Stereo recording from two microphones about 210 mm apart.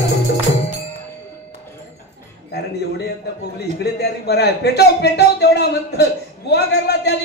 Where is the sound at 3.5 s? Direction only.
50° left (ahead or behind).